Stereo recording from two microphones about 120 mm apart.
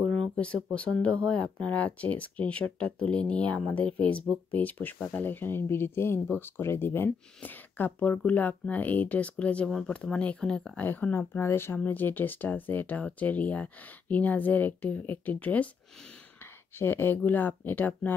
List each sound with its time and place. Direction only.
0.2 s speech: 10° left (ahead or behind)
10.9 s speech: 15° left (ahead or behind)
16.7 s speech: 20° left (ahead or behind)